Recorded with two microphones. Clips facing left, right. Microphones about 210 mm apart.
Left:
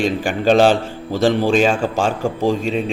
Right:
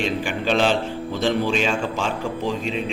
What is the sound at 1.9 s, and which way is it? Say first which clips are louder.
Speech: left 6 dB; 50° left (ahead or behind).